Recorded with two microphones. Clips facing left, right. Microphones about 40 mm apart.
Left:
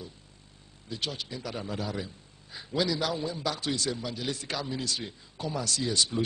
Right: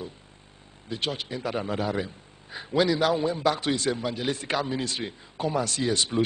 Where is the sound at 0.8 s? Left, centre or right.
Right.